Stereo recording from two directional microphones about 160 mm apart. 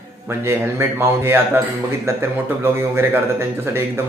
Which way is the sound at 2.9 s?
15° right (ahead or behind).